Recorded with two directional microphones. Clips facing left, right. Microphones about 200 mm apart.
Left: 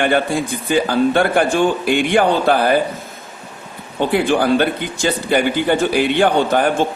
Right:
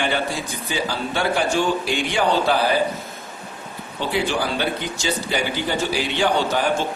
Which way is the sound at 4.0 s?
55° left (ahead or behind).